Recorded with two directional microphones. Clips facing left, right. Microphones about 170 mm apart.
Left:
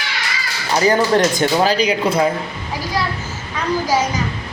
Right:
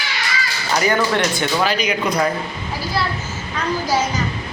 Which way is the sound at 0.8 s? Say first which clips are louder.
Left 4 dB; 30° left (ahead or behind).